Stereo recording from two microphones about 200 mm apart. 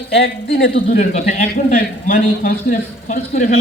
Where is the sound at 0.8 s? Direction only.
40° left (ahead or behind).